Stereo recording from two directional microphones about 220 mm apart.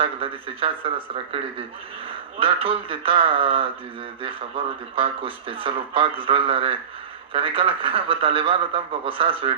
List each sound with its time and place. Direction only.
0.0 s speech: 25° right (ahead or behind)